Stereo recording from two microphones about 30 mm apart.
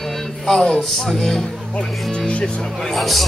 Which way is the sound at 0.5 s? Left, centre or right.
Centre.